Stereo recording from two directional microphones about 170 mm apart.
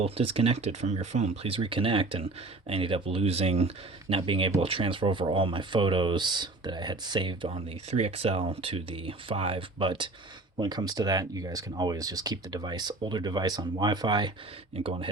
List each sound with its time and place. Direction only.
0.0 s speech: 35° right (ahead or behind)